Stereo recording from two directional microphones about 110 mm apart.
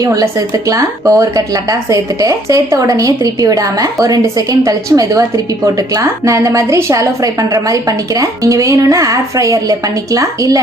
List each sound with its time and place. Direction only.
0.0 s a woman's voice: 30° right (ahead or behind)